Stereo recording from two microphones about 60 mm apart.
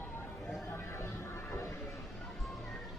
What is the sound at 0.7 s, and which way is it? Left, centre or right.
Music, left.